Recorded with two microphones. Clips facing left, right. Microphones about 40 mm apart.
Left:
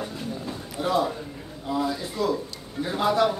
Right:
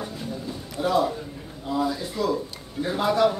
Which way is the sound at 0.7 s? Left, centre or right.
Centre.